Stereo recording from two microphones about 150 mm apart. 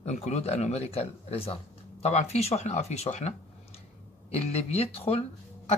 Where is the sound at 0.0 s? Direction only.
50° left (ahead or behind).